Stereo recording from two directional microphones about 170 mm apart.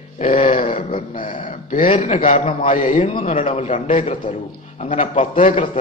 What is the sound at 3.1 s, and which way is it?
A man's voice, 30° left (ahead or behind).